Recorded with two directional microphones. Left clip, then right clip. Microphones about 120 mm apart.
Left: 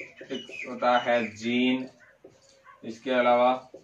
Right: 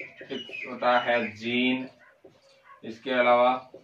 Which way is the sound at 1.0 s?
30° left (ahead or behind).